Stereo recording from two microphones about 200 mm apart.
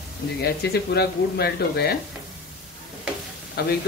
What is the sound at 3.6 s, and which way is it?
Speech, 55° left (ahead or behind).